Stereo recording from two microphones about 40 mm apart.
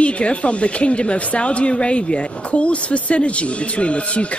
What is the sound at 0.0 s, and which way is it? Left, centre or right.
A woman's voice, left.